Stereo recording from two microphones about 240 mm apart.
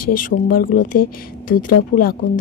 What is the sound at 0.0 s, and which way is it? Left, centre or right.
A woman's voice, left.